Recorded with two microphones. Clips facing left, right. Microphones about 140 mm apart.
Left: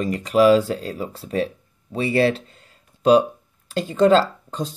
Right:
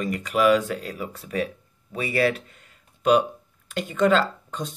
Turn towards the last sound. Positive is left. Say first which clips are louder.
# left 4 dB
turn(degrees=35)  # may be behind; listen again after turning